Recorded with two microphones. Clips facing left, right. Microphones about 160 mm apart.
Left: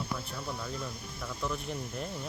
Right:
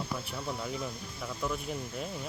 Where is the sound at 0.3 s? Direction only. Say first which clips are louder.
Right 2 dB; 10° right (ahead or behind).